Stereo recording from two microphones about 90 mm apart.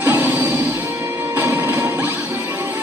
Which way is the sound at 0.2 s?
20° right (ahead or behind).